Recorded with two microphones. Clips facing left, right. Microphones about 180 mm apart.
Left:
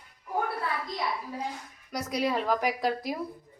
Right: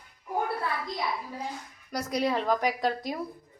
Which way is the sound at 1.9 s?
Centre (ahead or behind).